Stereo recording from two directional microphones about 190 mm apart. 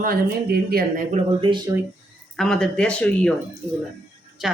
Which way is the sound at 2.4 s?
Centre (ahead or behind).